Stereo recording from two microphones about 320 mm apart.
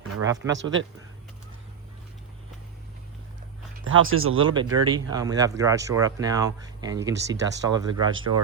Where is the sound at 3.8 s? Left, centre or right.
Right.